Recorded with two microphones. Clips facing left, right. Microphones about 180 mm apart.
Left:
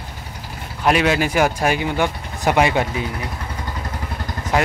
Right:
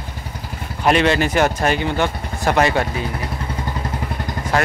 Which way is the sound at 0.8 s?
5° left (ahead or behind).